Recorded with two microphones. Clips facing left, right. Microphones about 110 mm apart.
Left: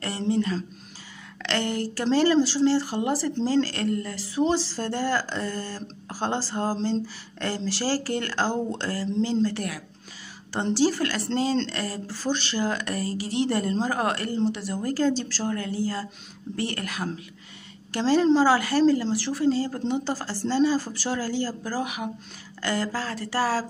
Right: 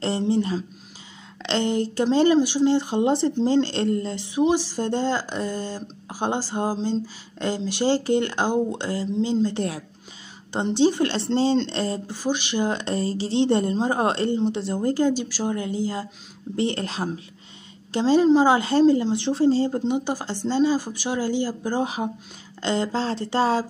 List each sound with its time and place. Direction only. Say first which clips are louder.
0.3 s speech: right 2 dB; 25° right (ahead or behind)
19.8 s speech: right 3 dB; 15° right (ahead or behind)